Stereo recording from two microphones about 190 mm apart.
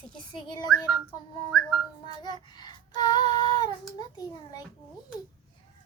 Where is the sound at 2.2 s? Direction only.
20° left (ahead or behind).